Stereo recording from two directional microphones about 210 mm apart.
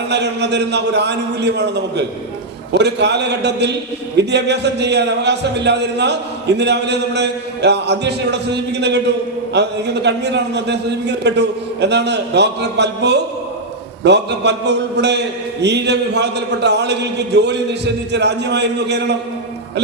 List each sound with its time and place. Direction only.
0.1 s a man's voice: 55° right (ahead or behind)